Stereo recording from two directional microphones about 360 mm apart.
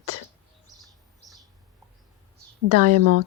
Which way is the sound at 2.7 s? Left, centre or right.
Right.